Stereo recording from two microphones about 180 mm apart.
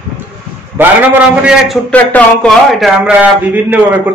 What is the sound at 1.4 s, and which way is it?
A man's voice, centre (ahead or behind).